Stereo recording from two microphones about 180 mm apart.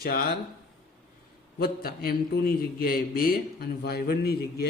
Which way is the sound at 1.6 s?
55° left (ahead or behind).